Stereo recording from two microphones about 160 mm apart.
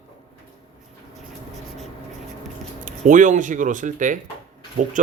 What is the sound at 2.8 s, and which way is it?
Speech, 55° right (ahead or behind).